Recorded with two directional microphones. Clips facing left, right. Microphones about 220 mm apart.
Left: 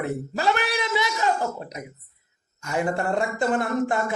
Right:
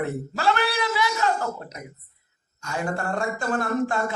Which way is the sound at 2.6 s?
20° left (ahead or behind).